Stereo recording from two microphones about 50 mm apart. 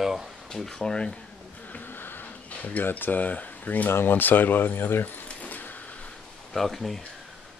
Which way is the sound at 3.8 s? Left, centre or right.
Left.